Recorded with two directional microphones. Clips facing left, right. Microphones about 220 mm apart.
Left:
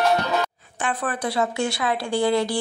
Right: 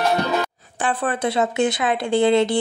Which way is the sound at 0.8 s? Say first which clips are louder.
Right 4 dB; 30° right (ahead or behind).